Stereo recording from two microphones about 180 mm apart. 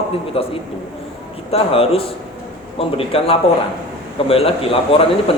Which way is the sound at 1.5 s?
30° left (ahead or behind).